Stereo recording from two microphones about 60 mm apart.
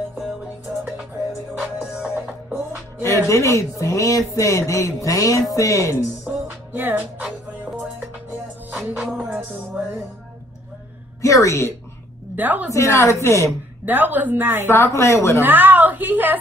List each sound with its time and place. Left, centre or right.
0.4 s music: centre
3.0 s music: left
6.2 s music: right
9.3 s music: right
11.1 s music: left
12.4 s a woman's voice: right
12.7 s a woman's voice: left
13.8 s a woman's voice: right
14.7 s a woman's voice: left
15.4 s a sound: right